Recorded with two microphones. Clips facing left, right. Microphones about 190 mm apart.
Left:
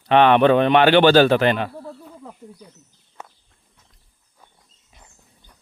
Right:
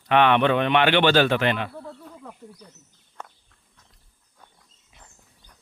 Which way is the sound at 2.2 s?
15° left (ahead or behind).